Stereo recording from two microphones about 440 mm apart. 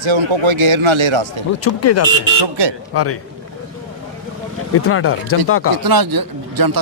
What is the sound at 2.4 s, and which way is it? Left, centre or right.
Speech, right.